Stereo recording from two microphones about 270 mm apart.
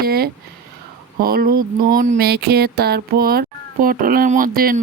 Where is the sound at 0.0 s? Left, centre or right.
Right.